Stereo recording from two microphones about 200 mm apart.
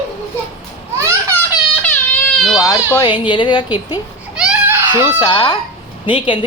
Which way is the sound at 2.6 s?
15° left (ahead or behind).